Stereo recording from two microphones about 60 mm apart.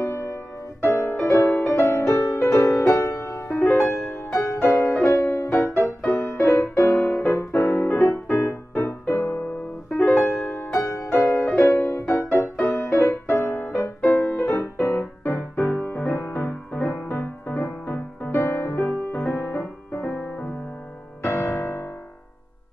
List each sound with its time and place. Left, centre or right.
0.0 s music: left
3.6 s music: left
4.3 s music: left
4.6 s music: left
10.7 s music: left
12.7 s music: left
13.1 s music: left
13.7 s music: left
21.2 s music: left